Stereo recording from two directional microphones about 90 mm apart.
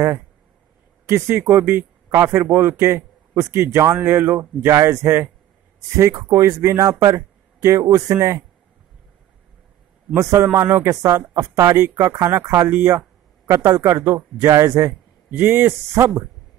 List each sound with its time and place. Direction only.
1.0 s a man's voice: 30° right (ahead or behind)
5.9 s speech: 35° right (ahead or behind)
10.1 s speech: 30° right (ahead or behind)
12.7 s a man's voice: 25° right (ahead or behind)
13.5 s speech: 35° right (ahead or behind)
14.9 s speech: 25° right (ahead or behind)